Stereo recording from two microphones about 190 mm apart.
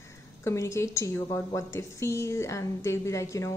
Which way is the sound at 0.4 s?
15° left (ahead or behind).